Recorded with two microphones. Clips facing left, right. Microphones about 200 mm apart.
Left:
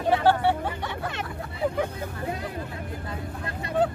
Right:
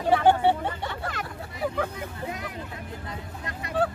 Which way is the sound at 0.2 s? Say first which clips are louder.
Right 1 dB; 15° right (ahead or behind).